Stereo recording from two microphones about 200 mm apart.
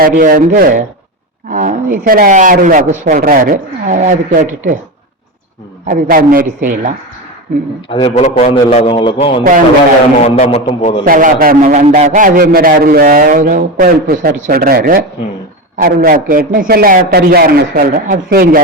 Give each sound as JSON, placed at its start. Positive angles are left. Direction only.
{"t": 0.0, "sound": "a man's voice", "side_deg": -45}
{"t": 5.9, "sound": "a man's voice", "side_deg": -45}
{"t": 7.9, "sound": "a man's voice", "side_deg": 30}
{"t": 11.0, "sound": "a man's voice", "side_deg": -45}